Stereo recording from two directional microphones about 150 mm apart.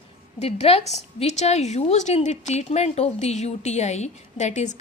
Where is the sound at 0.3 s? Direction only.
45° left (ahead or behind).